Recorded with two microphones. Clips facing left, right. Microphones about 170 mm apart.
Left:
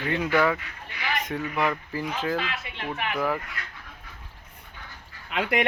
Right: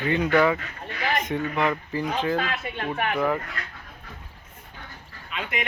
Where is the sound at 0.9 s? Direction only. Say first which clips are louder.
Right 4 dB; 40° right (ahead or behind).